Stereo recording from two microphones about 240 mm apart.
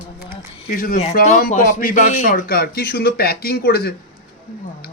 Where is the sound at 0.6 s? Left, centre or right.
Left.